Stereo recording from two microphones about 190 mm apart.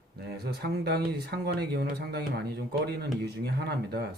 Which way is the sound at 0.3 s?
60° right (ahead or behind).